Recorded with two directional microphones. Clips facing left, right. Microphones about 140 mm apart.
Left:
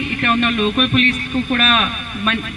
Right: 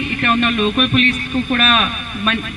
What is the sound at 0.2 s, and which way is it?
A man's voice, 30° right (ahead or behind).